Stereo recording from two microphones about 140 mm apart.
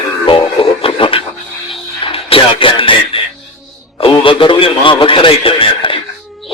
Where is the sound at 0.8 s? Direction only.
40° left (ahead or behind).